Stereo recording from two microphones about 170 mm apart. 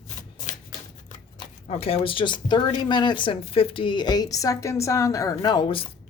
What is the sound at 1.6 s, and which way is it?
Speech, 35° left (ahead or behind).